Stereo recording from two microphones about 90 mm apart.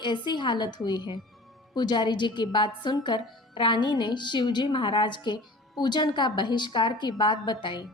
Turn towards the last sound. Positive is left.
turn(degrees=60)  # may be behind; listen again after turning